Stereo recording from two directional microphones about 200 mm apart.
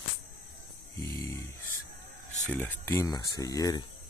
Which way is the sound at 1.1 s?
15° left (ahead or behind).